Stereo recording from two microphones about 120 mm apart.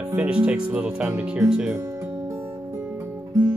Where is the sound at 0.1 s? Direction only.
10° right (ahead or behind).